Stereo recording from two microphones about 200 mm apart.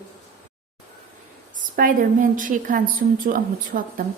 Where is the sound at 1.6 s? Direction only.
45° right (ahead or behind).